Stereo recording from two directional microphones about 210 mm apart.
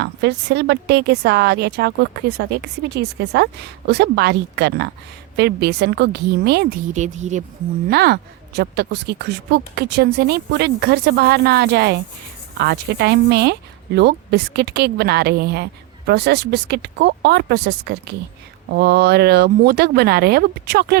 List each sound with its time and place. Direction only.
0.0 s speech: 55° right (ahead or behind)
6.9 s a woman's voice: 35° right (ahead or behind)
7.9 s speech: 50° right (ahead or behind)